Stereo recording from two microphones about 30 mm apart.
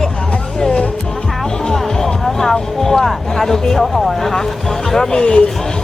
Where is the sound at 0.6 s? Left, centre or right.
Left.